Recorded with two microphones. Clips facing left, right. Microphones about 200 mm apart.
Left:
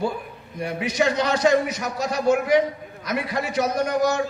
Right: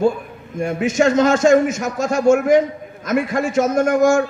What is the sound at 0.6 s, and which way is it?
A man's voice, 45° right (ahead or behind).